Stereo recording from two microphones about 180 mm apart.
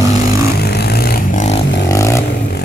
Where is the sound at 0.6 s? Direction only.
65° left (ahead or behind); by 1.6 s 45° left (ahead or behind).